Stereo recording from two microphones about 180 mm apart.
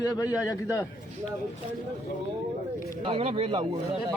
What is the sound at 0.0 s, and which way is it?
Speech, 20° left (ahead or behind).